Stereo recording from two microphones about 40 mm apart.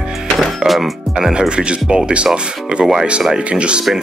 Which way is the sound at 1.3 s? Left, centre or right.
Right.